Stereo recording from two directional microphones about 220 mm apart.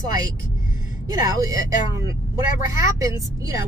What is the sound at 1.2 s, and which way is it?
Speech, 15° right (ahead or behind).